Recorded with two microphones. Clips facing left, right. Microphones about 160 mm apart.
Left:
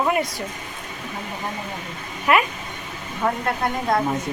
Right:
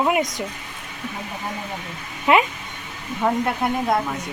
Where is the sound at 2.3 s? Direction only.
20° right (ahead or behind).